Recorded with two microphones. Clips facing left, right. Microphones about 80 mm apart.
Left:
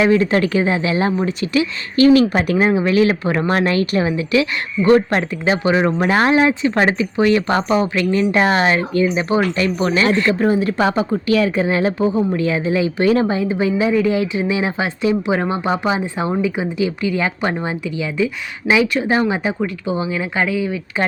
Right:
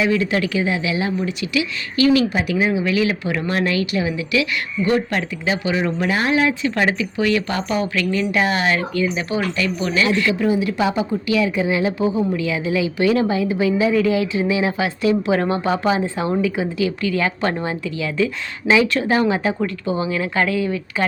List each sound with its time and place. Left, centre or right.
0.0 s speech: left; by 20.8 s centre